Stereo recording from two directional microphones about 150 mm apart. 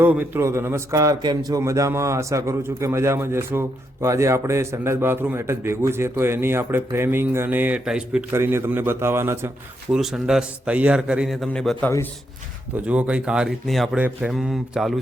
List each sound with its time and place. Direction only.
0.0 s a man's voice: 15° right (ahead or behind)
8.3 s a man's voice: 15° right (ahead or behind)
9.9 s a man's voice: 5° right (ahead or behind)
12.7 s a man's voice: 10° right (ahead or behind)